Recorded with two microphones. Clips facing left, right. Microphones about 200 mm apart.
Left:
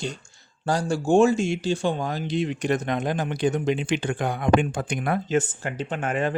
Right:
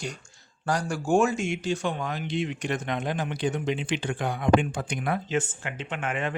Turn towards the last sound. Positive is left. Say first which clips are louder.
# left 5 dB
turn(degrees=40)  # may be behind; listen again after turning